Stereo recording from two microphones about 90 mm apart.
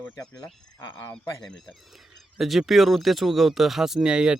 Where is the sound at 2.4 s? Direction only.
Centre (ahead or behind).